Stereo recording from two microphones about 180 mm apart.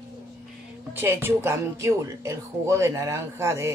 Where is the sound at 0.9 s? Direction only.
10° right (ahead or behind).